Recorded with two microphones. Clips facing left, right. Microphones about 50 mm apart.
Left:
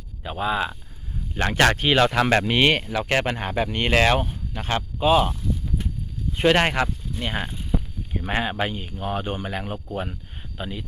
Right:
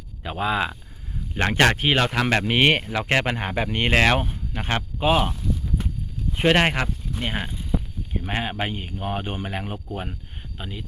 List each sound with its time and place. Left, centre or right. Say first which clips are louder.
0.2 s speech: right 1 dB; right
1.5 s speech: left 1 dB; centre
2.6 s speech: even; right
2.9 s speech: even; right
6.4 s speech: even; centre
8.3 s speech: left 3 dB; centre
8.7 s speech: left 1 dB; right
9.7 s speech: left 2 dB; centre